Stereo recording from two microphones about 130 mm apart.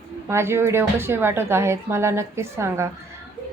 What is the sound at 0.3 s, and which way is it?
A woman's voice, 20° right (ahead or behind).